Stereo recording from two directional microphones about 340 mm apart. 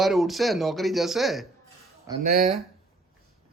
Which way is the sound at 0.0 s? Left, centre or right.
Centre.